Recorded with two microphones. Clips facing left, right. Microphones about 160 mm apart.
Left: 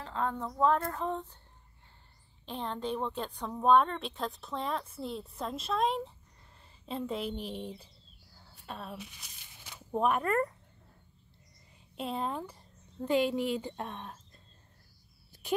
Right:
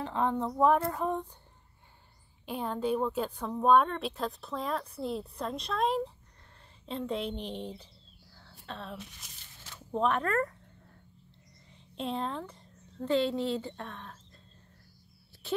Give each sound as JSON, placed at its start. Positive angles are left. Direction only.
{"t": 0.0, "sound": "speech", "side_deg": -20}
{"t": 2.4, "sound": "speech", "side_deg": -10}
{"t": 11.9, "sound": "a woman's voice", "side_deg": 5}